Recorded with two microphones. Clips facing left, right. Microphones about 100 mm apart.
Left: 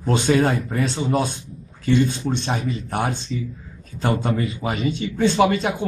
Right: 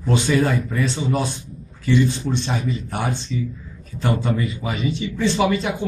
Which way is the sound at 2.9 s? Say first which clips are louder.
Left 4 dB; 50° left (ahead or behind).